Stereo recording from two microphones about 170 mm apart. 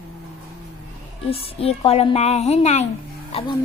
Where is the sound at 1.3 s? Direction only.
35° left (ahead or behind).